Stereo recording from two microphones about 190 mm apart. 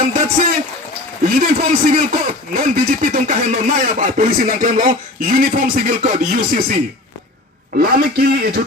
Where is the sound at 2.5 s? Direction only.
45° right (ahead or behind).